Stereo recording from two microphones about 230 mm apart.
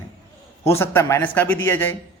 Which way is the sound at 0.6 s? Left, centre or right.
Centre.